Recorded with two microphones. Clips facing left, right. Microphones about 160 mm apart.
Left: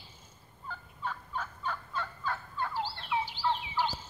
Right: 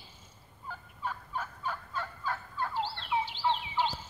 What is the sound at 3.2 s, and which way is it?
Turkey, 20° right (ahead or behind).